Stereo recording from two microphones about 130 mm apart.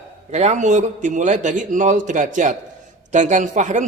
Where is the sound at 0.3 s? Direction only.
60° right (ahead or behind).